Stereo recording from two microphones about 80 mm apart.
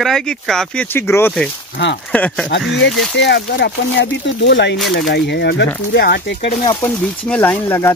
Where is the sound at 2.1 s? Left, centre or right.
Centre.